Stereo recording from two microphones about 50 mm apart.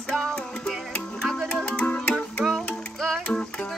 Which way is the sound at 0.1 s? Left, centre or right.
Centre.